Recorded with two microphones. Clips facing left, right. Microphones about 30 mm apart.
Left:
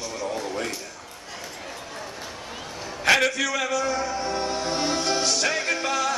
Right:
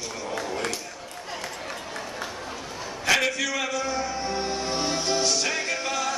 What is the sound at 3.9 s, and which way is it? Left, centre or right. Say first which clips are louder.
Music: left 2 dB; centre.